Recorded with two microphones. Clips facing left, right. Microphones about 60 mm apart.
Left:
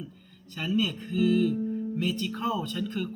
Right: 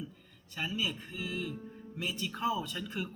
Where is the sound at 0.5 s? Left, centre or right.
Centre.